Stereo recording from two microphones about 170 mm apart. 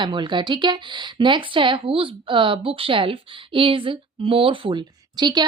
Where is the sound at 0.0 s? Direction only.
25° right (ahead or behind).